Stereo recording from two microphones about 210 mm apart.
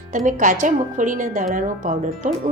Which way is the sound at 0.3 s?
40° right (ahead or behind).